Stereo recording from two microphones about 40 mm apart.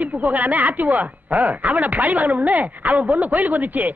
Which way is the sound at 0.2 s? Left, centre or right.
Right.